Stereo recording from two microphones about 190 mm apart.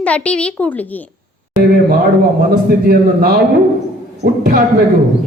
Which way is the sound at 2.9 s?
50° right (ahead or behind).